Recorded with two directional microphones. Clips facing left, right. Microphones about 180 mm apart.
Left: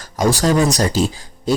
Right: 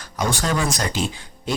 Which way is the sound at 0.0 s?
40° left (ahead or behind).